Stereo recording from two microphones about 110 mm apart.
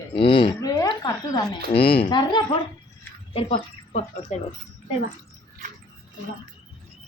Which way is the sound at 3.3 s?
55° left (ahead or behind).